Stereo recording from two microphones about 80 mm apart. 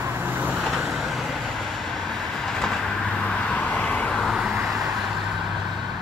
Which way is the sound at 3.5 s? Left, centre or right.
Centre.